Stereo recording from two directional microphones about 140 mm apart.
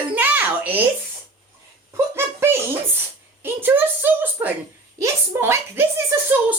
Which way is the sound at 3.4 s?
15° right (ahead or behind).